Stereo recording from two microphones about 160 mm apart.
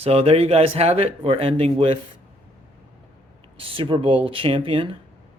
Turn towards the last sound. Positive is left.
turn(degrees=-35)  # may be behind; listen again after turning